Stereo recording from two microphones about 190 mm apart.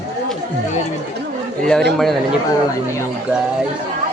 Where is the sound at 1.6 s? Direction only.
5° left (ahead or behind).